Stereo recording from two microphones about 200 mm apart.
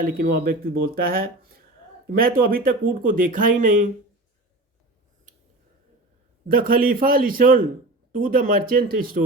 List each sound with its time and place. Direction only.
0.0 s speech: 45° right (ahead or behind)
6.5 s speech: 45° right (ahead or behind)